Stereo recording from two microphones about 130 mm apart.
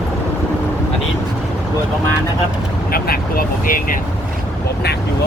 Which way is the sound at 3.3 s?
90° left.